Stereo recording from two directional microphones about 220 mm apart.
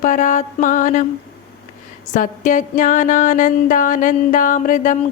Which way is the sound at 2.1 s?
35° left (ahead or behind).